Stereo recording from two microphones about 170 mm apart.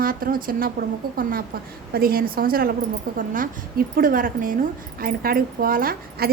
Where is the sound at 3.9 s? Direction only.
55° right (ahead or behind).